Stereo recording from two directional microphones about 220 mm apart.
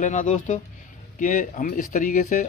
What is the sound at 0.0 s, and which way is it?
Speech, 35° left (ahead or behind).